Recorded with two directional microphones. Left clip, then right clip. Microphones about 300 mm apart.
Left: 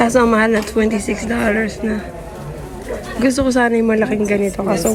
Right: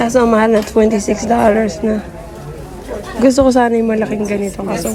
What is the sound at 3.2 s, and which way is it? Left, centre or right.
A woman's voice, centre.